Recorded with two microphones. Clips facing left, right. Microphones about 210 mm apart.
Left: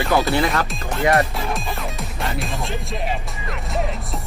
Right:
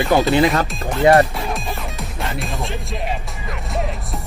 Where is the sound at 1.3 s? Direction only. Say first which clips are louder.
Right 1 dB; centre (ahead or behind).